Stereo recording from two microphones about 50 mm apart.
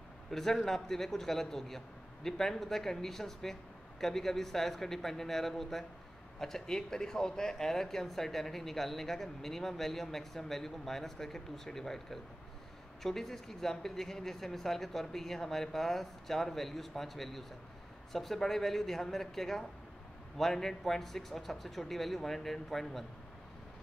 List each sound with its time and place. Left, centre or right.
0.3 s speech: centre